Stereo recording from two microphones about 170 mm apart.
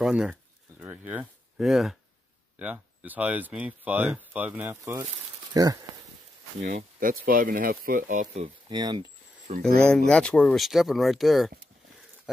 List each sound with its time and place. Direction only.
0.0 s a sound: 5° right (ahead or behind)
2.6 s speech: 10° right (ahead or behind)
6.6 s speech: 50° right (ahead or behind)
8.6 s speech: 25° right (ahead or behind)
9.6 s speech: 5° left (ahead or behind)